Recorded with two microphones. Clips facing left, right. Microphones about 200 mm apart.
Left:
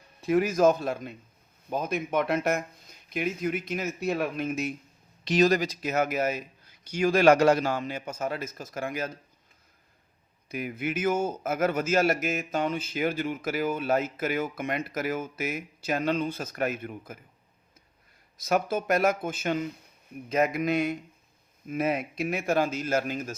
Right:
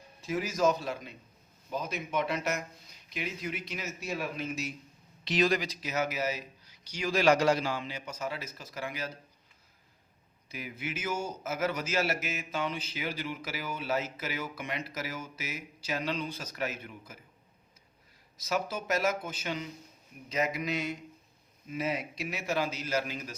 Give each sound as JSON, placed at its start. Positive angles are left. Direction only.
{"t": 0.2, "sound": "a man's voice", "side_deg": 60}
{"t": 5.2, "sound": "a man's voice", "side_deg": 45}
{"t": 10.5, "sound": "a man's voice", "side_deg": 55}
{"t": 18.3, "sound": "a man's voice", "side_deg": 55}